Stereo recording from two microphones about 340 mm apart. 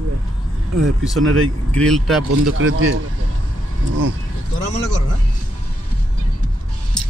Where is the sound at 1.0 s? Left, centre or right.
Centre.